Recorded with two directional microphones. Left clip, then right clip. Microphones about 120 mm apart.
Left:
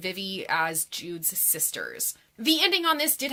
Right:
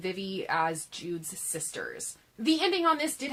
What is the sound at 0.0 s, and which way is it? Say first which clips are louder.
A woman's voice: left 2 dB; 20° left (ahead or behind).